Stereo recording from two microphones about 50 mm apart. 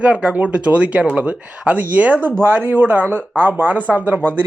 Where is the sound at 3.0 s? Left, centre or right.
Left.